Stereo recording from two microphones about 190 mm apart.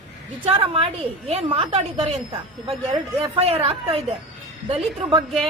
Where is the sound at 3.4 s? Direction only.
30° right (ahead or behind).